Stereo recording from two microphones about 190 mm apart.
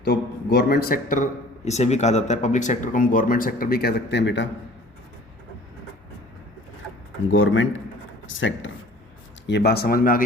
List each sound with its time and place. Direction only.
0.0 s a man's voice: 60° left (ahead or behind)
7.3 s a man's voice: 90° left
9.5 s a man's voice: 60° left (ahead or behind)